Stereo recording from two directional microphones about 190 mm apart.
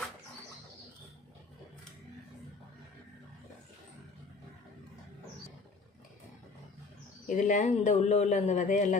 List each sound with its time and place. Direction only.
7.3 s a man's voice: 40° left (ahead or behind)